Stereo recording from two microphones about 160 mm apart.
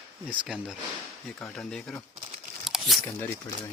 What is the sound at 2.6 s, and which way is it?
Camera, centre (ahead or behind).